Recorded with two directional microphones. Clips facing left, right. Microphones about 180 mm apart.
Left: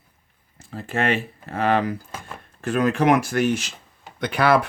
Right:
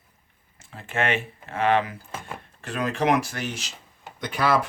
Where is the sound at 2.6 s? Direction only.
50° left (ahead or behind).